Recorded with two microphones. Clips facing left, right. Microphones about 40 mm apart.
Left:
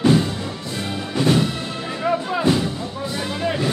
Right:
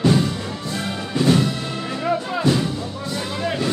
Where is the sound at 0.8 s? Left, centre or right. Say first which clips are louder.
Right 1 dB; centre.